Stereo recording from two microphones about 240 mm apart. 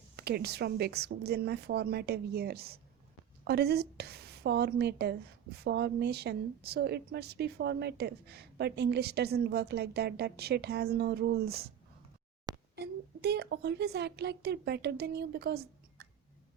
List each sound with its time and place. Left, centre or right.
0.2 s a woman's voice: right
12.7 s a woman's voice: right